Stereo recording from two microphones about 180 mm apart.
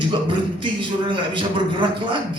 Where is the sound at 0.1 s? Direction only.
25° right (ahead or behind).